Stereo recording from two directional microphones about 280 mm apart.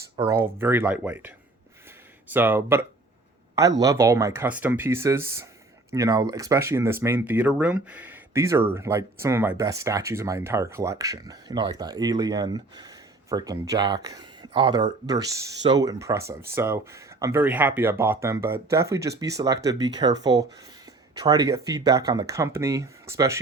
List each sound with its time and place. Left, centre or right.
0.3 s speech: centre
2.3 s speech: centre